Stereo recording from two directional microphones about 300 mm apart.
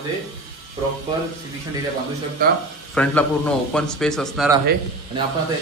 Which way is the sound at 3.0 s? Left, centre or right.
Centre.